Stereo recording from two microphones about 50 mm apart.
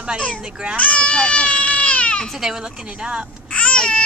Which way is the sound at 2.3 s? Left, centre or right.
Centre.